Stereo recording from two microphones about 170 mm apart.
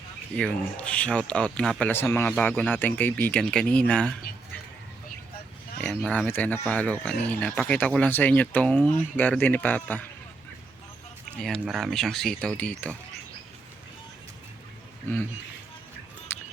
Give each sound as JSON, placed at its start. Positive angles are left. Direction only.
{"t": 0.3, "sound": "speech", "side_deg": 5}
{"t": 5.8, "sound": "speech", "side_deg": 5}
{"t": 11.3, "sound": "speech", "side_deg": 5}
{"t": 16.3, "sound": "music", "side_deg": 10}